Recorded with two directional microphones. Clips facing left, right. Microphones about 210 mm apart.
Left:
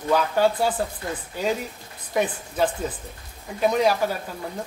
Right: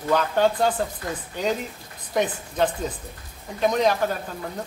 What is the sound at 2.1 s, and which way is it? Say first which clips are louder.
A man's voice: even; 5° left (ahead or behind).